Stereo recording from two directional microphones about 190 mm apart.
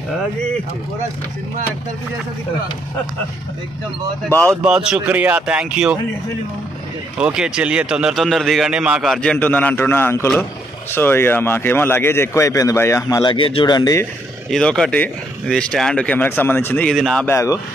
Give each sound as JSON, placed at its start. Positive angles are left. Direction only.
{"t": 4.3, "sound": "speech", "side_deg": 10}
{"t": 4.6, "sound": "a man's voice", "side_deg": -5}
{"t": 7.2, "sound": "a man's voice", "side_deg": -5}
{"t": 14.5, "sound": "a man's voice", "side_deg": 5}